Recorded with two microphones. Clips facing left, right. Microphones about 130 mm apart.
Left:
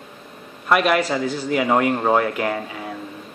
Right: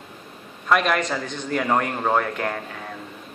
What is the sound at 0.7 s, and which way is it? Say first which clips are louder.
A man's voice: left 3 dB; 5° left (ahead or behind).